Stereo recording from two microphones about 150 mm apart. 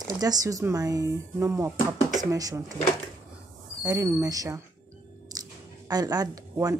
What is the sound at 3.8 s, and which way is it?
Speech, 20° right (ahead or behind).